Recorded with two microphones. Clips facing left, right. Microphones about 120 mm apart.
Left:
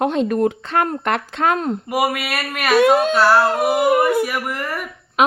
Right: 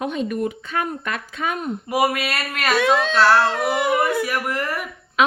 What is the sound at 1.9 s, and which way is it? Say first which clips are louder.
Speech: right 2 dB; 5° left (ahead or behind).